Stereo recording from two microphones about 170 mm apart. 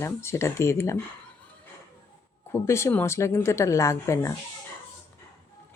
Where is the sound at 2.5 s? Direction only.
15° left (ahead or behind).